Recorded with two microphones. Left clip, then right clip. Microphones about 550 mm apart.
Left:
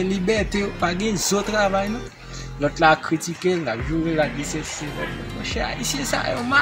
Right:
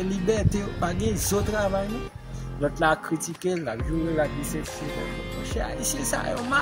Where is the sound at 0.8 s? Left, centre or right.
Right.